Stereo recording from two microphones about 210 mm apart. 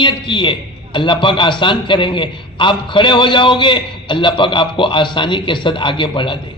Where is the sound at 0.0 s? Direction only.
25° left (ahead or behind).